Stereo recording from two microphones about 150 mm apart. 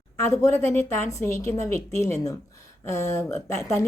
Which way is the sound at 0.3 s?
20° left (ahead or behind).